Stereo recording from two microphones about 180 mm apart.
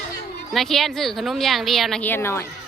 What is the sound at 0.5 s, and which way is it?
Speech, centre (ahead or behind).